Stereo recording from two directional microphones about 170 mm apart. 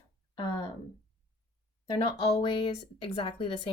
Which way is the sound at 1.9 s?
30° left (ahead or behind).